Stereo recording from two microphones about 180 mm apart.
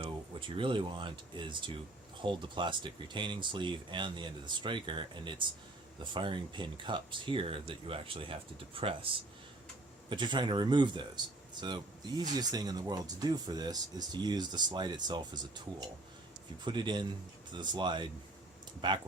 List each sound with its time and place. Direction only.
0.0 s speech: 30° right (ahead or behind)
16.6 s speech: 25° right (ahead or behind)